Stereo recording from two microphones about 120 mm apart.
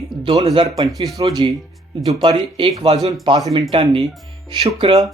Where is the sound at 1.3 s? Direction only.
35° right (ahead or behind).